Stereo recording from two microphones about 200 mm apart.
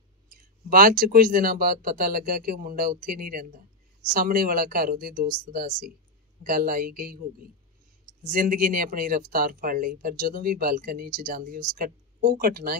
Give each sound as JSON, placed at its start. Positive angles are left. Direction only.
{"t": 0.3, "sound": "speech", "side_deg": -45}
{"t": 8.2, "sound": "speech", "side_deg": -45}